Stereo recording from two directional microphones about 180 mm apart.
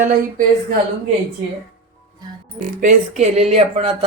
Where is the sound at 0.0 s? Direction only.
50° right (ahead or behind).